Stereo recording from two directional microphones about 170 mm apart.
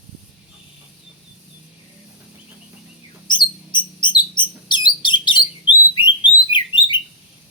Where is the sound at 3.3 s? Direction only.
25° left (ahead or behind).